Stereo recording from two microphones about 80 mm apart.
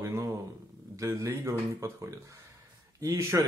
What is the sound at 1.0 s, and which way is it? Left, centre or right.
Speech, right.